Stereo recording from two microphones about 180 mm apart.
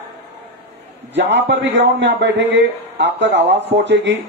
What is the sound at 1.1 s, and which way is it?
A man's voice, 75° right (ahead or behind).